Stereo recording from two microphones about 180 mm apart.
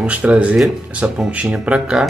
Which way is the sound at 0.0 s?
10° right (ahead or behind).